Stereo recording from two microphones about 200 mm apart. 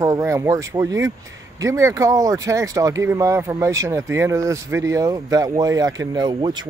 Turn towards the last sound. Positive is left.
turn(degrees=-20)  # may be behind; listen again after turning